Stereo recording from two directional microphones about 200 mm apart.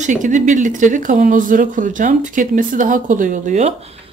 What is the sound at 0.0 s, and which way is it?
Speech, 40° right (ahead or behind).